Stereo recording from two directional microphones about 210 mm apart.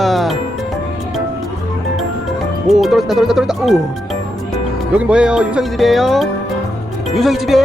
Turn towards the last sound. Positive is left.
turn(degrees=0)  # may be behind; listen again after turning